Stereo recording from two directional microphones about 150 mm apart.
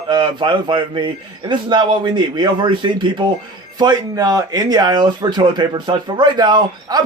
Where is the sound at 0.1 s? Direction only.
30° right (ahead or behind).